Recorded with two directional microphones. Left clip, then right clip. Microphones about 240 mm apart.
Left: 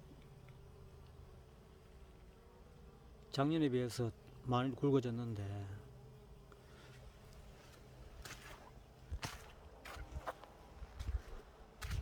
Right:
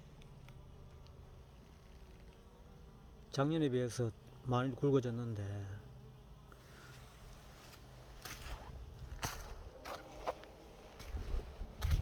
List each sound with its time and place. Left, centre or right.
3.3 s speech: centre
8.2 s a sound: right
9.8 s boat: right
11.8 s bee: right